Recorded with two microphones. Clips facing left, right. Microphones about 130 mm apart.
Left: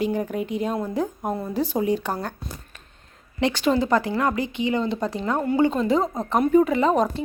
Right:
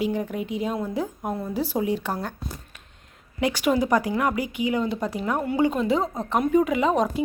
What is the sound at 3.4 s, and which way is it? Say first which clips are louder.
Speech: left 1 dB; 10° right (ahead or behind).